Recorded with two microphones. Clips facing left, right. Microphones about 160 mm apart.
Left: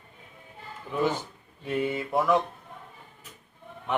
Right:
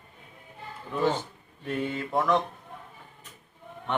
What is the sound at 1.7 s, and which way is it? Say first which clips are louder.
Speech: left 2 dB; 10° left (ahead or behind).